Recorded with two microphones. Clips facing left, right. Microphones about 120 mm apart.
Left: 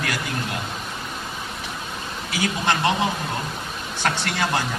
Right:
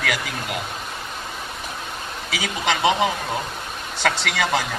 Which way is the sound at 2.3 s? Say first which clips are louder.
Left 1 dB; 90° right.